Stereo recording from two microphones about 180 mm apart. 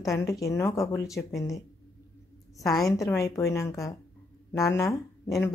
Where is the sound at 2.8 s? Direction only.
15° left (ahead or behind).